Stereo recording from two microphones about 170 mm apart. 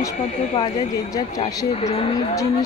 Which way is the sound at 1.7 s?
35° left (ahead or behind).